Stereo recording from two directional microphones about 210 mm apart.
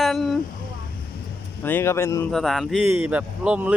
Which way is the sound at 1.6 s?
10° left (ahead or behind).